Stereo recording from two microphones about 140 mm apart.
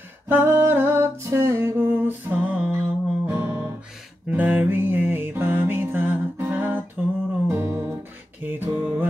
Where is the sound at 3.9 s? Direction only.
10° right (ahead or behind).